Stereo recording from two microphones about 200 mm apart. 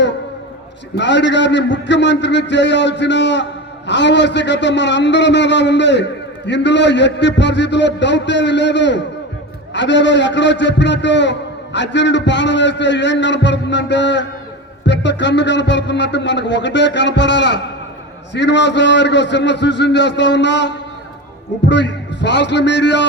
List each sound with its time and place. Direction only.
0.9 s a man's voice: 60° left (ahead or behind)